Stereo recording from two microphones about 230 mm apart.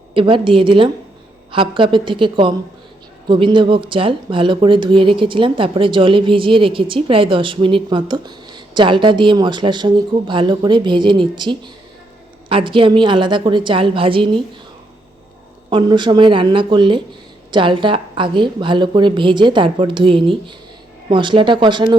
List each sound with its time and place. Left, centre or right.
0.1 s speech: right
15.7 s speech: centre